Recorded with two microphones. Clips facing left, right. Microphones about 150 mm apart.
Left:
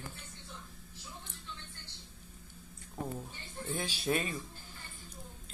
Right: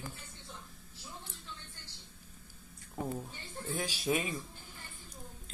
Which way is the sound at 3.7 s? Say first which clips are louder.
Even; 10° right (ahead or behind).